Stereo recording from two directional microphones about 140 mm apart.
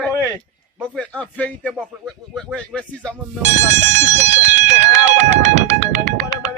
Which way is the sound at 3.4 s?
55° right (ahead or behind).